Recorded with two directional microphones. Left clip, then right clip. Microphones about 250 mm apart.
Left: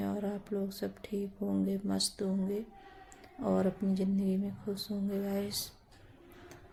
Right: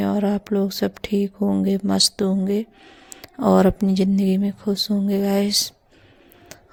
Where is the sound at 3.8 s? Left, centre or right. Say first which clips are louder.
Right 13 dB; right.